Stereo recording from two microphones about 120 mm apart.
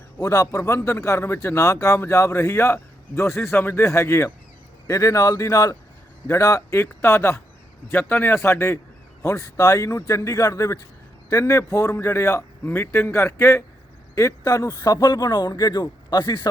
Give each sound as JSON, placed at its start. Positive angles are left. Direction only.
{"t": 0.2, "sound": "a man's voice", "side_deg": 30}